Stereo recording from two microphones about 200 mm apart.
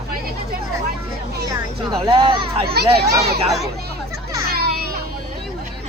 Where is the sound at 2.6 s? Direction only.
50° right (ahead or behind).